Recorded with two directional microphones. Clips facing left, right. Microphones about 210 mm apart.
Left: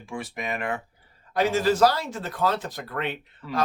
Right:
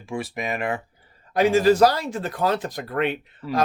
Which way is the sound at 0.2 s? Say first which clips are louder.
Right 3 dB; 10° right (ahead or behind).